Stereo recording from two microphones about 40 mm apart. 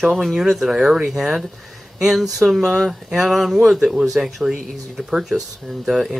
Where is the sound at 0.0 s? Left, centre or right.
Centre.